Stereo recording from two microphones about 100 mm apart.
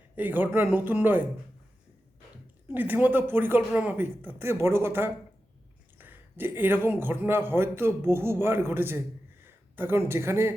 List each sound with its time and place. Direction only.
0.2 s speech: 15° right (ahead or behind)
2.7 s a man's voice: 20° right (ahead or behind)